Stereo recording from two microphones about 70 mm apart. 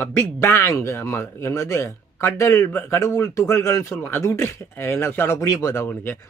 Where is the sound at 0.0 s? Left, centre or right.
Left.